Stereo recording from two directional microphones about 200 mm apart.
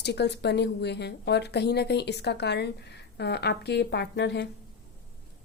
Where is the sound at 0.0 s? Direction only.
55° left (ahead or behind).